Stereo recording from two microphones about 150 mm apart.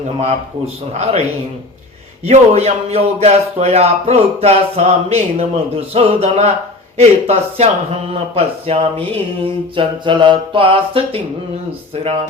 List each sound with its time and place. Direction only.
0.9 s a man's voice: 45° right (ahead or behind)
2.2 s a man's voice: 45° right (ahead or behind)